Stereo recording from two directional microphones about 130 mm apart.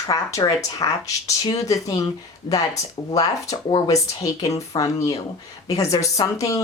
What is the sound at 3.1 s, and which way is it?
Speech, 30° left (ahead or behind).